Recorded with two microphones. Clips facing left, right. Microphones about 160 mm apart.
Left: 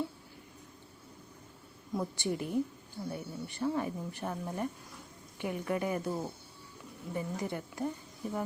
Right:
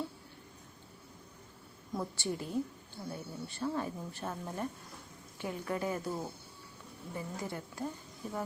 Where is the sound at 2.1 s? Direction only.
20° left (ahead or behind).